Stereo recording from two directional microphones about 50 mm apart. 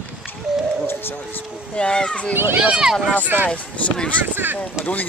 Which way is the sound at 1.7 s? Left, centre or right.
Centre.